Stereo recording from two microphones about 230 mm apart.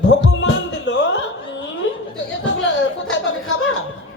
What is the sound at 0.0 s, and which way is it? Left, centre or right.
Music, left.